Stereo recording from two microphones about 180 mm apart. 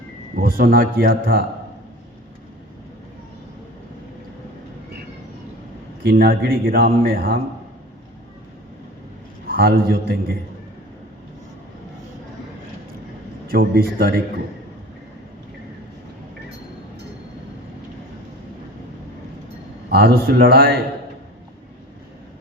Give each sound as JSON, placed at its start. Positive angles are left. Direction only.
{"t": 0.3, "sound": "a man's voice", "side_deg": -55}
{"t": 6.0, "sound": "a man's voice", "side_deg": -60}
{"t": 9.5, "sound": "a man's voice", "side_deg": -55}
{"t": 13.5, "sound": "a man's voice", "side_deg": -55}
{"t": 19.9, "sound": "a man's voice", "side_deg": -60}